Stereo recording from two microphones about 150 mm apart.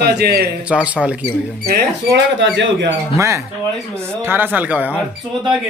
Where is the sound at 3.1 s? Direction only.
20° right (ahead or behind).